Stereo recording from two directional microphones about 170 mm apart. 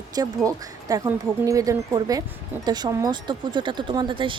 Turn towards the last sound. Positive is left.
turn(degrees=-30)  # may be behind; listen again after turning